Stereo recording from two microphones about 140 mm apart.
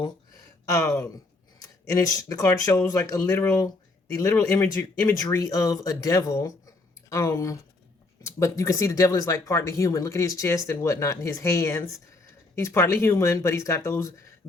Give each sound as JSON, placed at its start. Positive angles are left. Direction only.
{"t": 0.9, "sound": "speech", "side_deg": 10}
{"t": 1.9, "sound": "speech", "side_deg": 25}
{"t": 4.6, "sound": "speech", "side_deg": 10}
{"t": 5.1, "sound": "speech", "side_deg": 25}